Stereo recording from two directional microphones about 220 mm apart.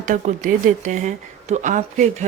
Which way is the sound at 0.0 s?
35° right (ahead or behind).